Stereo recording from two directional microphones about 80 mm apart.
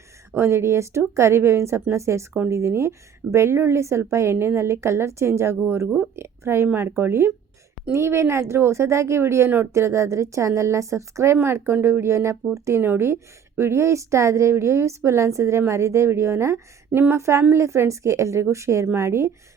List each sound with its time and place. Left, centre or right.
0.3 s a woman's voice: right